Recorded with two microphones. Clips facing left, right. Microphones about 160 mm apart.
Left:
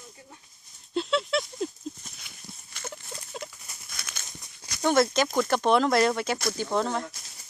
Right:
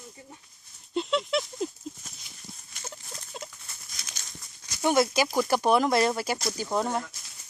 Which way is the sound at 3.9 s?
60° left (ahead or behind).